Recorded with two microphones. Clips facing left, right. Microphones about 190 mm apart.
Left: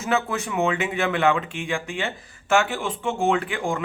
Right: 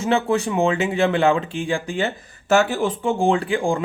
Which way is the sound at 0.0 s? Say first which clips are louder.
Right 5 dB; 30° right (ahead or behind).